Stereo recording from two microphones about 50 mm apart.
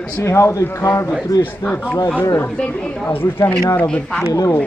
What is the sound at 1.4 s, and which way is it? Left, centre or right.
Speech, left.